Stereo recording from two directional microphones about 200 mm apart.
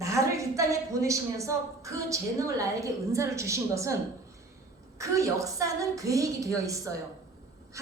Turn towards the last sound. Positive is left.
turn(degrees=-15)  # may be behind; listen again after turning